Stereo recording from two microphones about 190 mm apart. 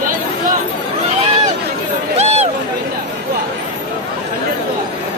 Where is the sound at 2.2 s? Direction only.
35° right (ahead or behind).